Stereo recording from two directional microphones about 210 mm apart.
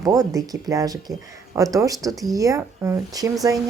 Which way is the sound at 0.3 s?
15° right (ahead or behind).